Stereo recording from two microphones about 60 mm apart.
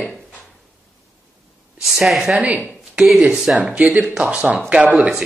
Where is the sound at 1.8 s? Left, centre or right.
Centre.